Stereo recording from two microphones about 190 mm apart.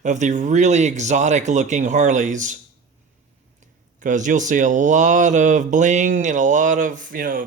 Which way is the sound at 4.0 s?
40° right (ahead or behind).